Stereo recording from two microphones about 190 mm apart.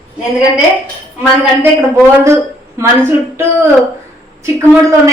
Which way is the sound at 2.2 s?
15° right (ahead or behind).